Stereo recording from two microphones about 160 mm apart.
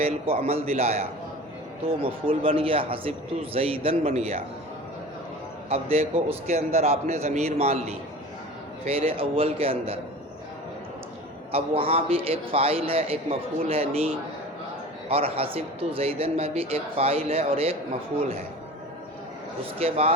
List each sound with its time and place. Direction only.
0.0 s a man's voice: 40° right (ahead or behind)
5.6 s a man's voice: 40° right (ahead or behind)
11.5 s a man's voice: 35° right (ahead or behind)
15.1 s a man's voice: 35° right (ahead or behind)
19.8 s a man's voice: 40° right (ahead or behind)